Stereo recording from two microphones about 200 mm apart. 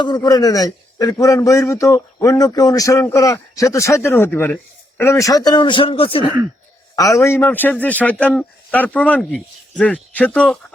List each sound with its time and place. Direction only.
0.0 s a man's voice: 20° left (ahead or behind)
7.2 s a man's voice: 10° left (ahead or behind)